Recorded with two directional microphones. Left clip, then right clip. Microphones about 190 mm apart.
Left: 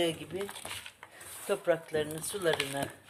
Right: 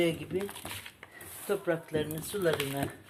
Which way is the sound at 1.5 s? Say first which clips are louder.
Left 1 dB; 40° left (ahead or behind).